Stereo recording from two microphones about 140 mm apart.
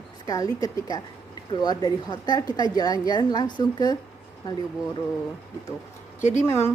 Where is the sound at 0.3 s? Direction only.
25° left (ahead or behind).